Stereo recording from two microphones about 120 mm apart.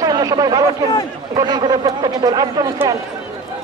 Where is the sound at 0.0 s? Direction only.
30° right (ahead or behind).